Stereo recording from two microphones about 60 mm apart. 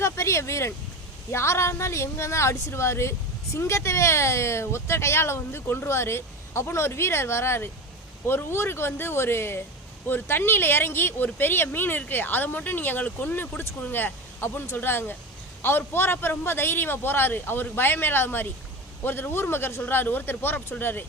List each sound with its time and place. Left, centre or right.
0.0 s speech: left